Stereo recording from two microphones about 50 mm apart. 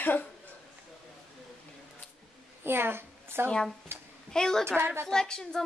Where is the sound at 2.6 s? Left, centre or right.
Right.